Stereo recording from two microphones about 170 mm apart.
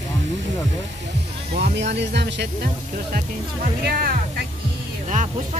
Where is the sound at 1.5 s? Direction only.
85° right.